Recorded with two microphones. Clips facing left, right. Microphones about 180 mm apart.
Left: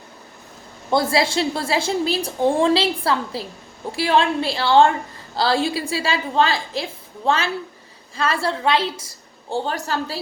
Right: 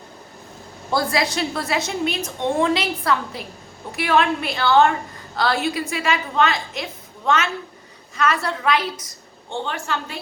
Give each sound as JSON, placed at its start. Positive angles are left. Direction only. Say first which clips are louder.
{"t": 0.9, "sound": "a woman's voice", "louder": "left 3 dB", "side_deg": 25}